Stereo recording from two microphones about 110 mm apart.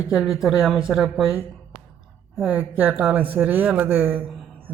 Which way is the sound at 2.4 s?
15° right (ahead or behind).